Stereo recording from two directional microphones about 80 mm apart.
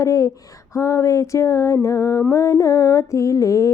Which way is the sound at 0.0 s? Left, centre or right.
Left.